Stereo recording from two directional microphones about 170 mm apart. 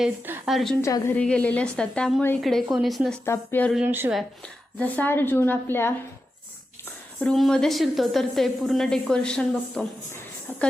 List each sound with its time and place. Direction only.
0.0 s a woman's voice: 5° right (ahead or behind)
0.8 s a woman's voice: 20° left (ahead or behind)
1.1 s a woman's voice: 5° left (ahead or behind)
3.2 s a woman's voice: 15° left (ahead or behind)
3.8 s speech: 15° right (ahead or behind)
4.8 s a woman's voice: 10° left (ahead or behind)
7.2 s a woman's voice: centre (ahead or behind)